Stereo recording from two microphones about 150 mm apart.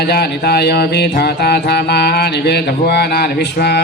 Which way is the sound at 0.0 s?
90° left.